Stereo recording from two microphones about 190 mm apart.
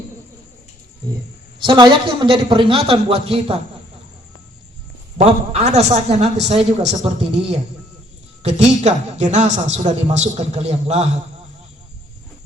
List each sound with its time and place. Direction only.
1.5 s a man's voice: 25° right (ahead or behind)
5.1 s a woman's voice: 35° right (ahead or behind)